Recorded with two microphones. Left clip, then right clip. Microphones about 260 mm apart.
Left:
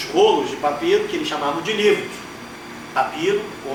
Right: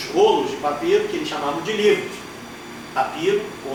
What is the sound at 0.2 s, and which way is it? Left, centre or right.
Speech, left.